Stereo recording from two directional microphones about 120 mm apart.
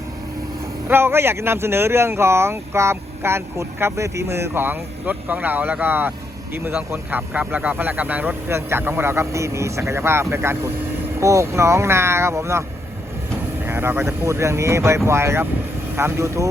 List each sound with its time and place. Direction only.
0.9 s speech: 20° right (ahead or behind)
13.7 s speech: 20° right (ahead or behind)